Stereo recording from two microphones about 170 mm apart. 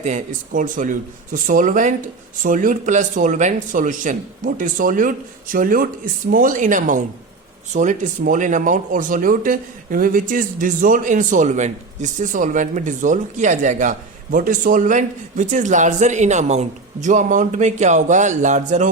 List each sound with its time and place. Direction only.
0.0 s speech: 45° right (ahead or behind)